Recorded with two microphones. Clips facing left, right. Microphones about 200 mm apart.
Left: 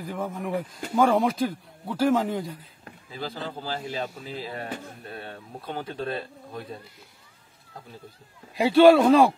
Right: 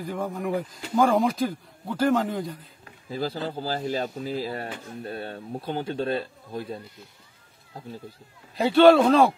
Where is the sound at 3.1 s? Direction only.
40° right (ahead or behind).